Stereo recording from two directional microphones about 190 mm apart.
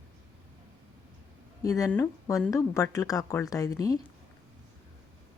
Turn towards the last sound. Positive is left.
turn(degrees=20)  # may be behind; listen again after turning